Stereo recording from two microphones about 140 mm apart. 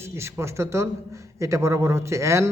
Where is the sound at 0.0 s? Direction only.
20° right (ahead or behind).